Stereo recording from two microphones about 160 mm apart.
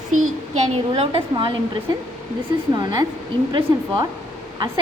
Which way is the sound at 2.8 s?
25° right (ahead or behind).